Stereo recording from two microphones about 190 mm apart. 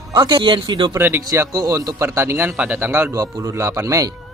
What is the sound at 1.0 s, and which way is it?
A man's voice, 10° right (ahead or behind).